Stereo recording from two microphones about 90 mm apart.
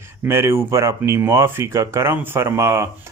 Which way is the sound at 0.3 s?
25° right (ahead or behind).